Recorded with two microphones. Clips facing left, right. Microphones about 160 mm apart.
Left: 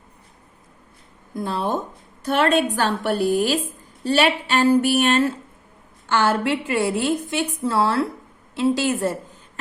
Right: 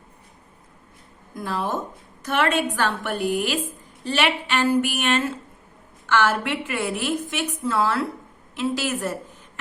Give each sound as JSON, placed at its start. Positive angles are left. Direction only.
{"t": 1.4, "sound": "a woman's voice", "side_deg": 30}